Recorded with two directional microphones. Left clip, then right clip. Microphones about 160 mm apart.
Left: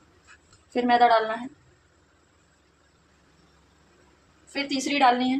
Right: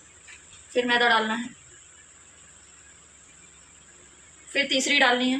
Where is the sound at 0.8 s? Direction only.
80° left.